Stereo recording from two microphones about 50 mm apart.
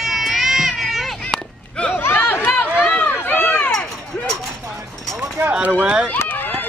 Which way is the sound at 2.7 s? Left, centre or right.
Left.